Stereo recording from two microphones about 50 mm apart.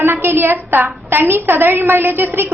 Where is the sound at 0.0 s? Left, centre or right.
Right.